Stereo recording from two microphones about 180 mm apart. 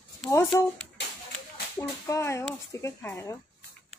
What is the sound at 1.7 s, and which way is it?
Speech, 15° left (ahead or behind).